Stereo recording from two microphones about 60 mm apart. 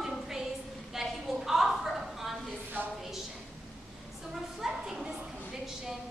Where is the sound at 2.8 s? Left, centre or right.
Right.